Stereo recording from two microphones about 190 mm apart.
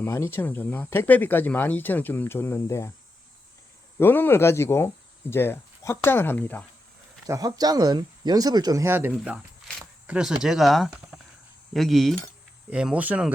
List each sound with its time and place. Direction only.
0.0 s speech: 15° left (ahead or behind)
3.9 s speech: 10° left (ahead or behind)
7.3 s speech: 20° right (ahead or behind)
9.6 s a sound: 5° right (ahead or behind)
10.4 s speech: centre (ahead or behind)